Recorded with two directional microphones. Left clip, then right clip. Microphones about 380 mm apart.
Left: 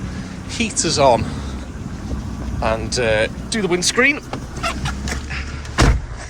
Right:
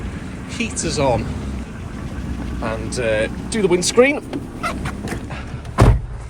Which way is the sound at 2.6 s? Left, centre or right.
Centre.